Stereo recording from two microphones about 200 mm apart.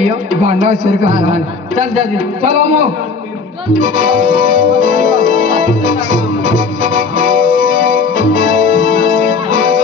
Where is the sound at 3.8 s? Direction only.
40° right (ahead or behind).